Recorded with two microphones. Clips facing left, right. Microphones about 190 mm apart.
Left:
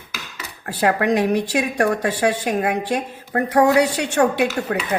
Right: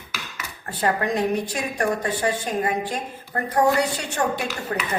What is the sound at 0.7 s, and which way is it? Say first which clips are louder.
A woman's voice: left 5 dB; 70° left (ahead or behind).